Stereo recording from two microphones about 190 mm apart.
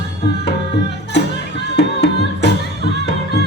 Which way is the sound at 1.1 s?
65° left (ahead or behind).